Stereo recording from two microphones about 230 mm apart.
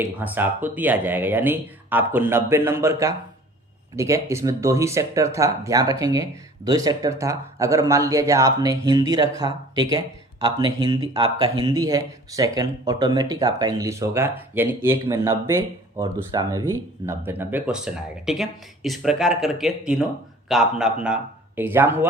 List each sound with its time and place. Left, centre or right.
0.0 s speech: centre